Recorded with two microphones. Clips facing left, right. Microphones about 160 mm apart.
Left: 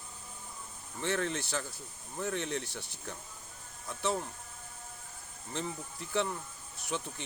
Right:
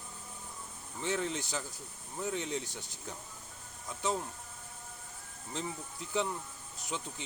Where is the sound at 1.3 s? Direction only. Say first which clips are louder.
Left 2 dB; 15° right (ahead or behind).